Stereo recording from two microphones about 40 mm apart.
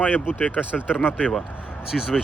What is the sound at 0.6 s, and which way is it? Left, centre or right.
Speech, left.